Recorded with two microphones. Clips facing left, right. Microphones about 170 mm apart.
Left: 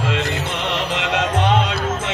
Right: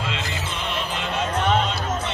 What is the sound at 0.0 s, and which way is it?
Music, 65° left (ahead or behind).